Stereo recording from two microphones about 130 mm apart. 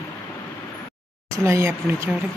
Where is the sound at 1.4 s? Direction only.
20° right (ahead or behind).